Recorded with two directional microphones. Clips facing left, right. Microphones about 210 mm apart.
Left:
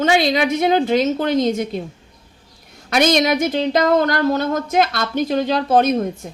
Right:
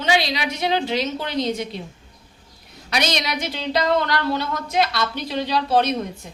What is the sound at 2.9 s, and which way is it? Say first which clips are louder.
Speech: left 8 dB; 50° left (ahead or behind).